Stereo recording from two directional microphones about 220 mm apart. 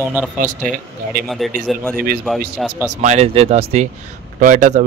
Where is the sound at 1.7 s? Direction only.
Centre (ahead or behind).